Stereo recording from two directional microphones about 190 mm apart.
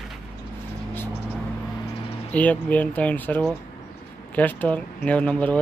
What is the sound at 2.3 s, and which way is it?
Speech, 10° left (ahead or behind).